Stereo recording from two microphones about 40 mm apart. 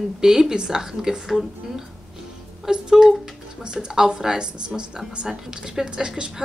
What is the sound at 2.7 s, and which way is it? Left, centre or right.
A woman's voice, centre.